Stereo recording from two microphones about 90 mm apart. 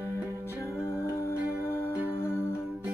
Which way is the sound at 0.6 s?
30° left (ahead or behind).